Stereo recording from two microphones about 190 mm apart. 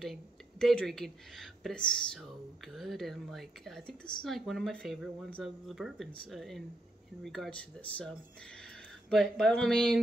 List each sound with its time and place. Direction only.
0.0 s speech: centre (ahead or behind)
9.1 s speech: centre (ahead or behind)